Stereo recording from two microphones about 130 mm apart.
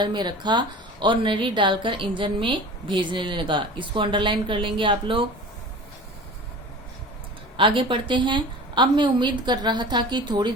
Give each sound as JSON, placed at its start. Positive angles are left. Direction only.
{"t": 0.0, "sound": "a woman's voice", "side_deg": -35}
{"t": 7.5, "sound": "a woman's voice", "side_deg": -40}